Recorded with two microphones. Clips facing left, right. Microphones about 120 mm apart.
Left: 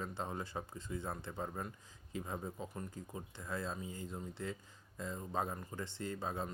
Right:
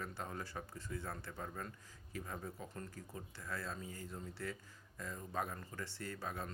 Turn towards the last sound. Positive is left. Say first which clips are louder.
# left 4 dB
turn(degrees=25)  # may be behind; listen again after turning